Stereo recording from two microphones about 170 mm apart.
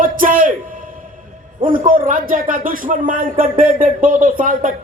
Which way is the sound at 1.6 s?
55° right (ahead or behind).